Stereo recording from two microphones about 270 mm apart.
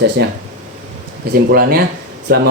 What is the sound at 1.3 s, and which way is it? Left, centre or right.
Speech, right.